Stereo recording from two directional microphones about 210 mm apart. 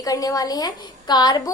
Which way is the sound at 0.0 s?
15° left (ahead or behind).